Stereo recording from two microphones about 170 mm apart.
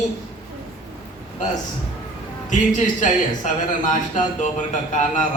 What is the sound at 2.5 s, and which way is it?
Speech, 50° left (ahead or behind).